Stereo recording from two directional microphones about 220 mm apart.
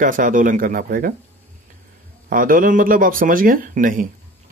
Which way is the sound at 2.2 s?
40° right (ahead or behind).